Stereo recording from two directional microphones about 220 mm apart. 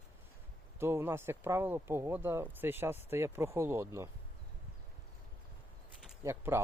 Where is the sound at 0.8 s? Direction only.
10° right (ahead or behind).